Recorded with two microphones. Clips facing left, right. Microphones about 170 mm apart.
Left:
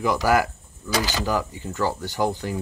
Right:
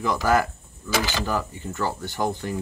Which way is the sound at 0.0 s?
10° left (ahead or behind).